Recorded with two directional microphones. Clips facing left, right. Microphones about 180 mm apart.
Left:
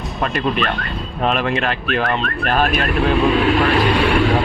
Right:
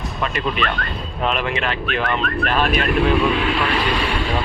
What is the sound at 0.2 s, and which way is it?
Speech, 40° left (ahead or behind).